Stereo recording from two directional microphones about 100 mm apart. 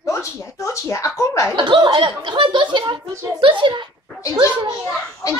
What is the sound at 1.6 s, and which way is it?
Chuckle, 50° right (ahead or behind).